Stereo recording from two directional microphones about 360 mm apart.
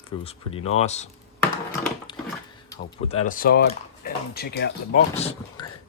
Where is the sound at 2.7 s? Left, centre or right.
Centre.